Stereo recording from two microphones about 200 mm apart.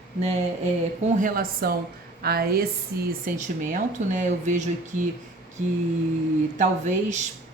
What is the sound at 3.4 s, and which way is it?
Speech, 40° right (ahead or behind).